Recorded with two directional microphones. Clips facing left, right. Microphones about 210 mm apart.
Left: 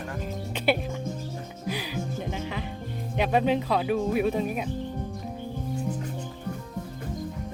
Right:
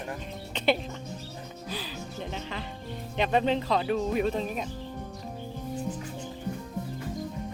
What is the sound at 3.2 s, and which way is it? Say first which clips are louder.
Speech: left 2 dB; 10° left (ahead or behind).